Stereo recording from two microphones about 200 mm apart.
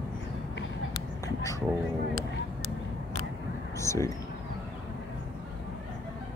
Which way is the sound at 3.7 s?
15° left (ahead or behind).